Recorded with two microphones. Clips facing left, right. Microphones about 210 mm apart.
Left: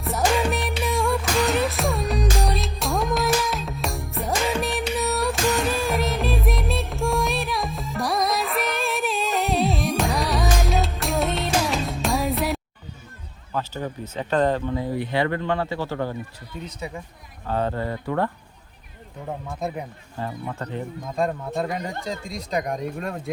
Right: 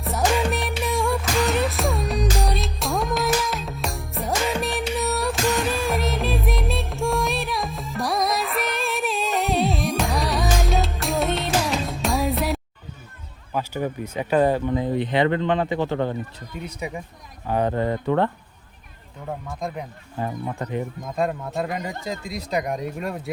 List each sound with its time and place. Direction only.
0.1 s music: centre (ahead or behind)
13.5 s speech: 10° right (ahead or behind)
19.6 s speech: 5° left (ahead or behind)
20.1 s speech: 15° right (ahead or behind)